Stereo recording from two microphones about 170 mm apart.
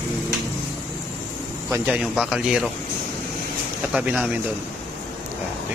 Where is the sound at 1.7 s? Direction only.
15° right (ahead or behind).